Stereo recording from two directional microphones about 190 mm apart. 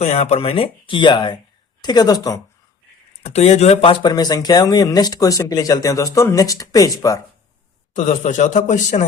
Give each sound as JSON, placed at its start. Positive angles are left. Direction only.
{"t": 0.0, "sound": "speech", "side_deg": 35}
{"t": 3.2, "sound": "speech", "side_deg": 35}
{"t": 7.9, "sound": "a man's voice", "side_deg": 40}